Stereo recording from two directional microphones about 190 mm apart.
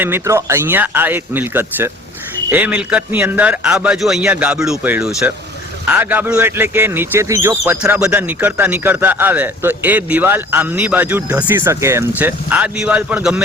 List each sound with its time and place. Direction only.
0.0 s speech: 15° right (ahead or behind)